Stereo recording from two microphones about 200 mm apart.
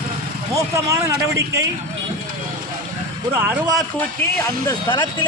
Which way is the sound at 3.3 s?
10° right (ahead or behind).